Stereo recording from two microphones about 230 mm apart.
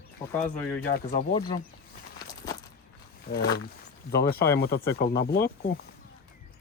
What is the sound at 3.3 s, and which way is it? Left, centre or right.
Speech, left.